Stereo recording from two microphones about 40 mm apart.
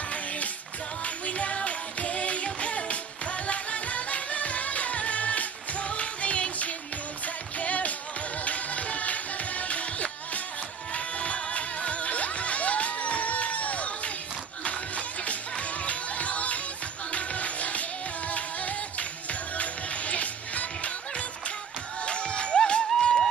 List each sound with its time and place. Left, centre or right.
1.0 s music: left
22.0 s music: left